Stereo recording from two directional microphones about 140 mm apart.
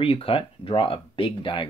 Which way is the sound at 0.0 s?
45° left (ahead or behind).